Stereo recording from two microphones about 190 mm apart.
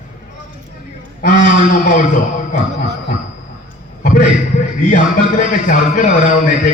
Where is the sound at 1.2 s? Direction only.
40° left (ahead or behind).